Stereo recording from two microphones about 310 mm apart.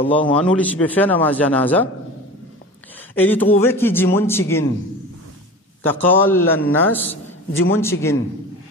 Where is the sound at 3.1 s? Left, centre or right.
Centre.